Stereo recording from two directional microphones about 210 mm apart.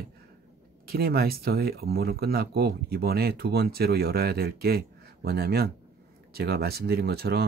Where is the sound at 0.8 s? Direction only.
50° right (ahead or behind).